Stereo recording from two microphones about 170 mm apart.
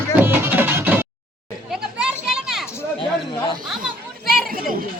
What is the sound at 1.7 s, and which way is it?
Children playing, 5° right (ahead or behind).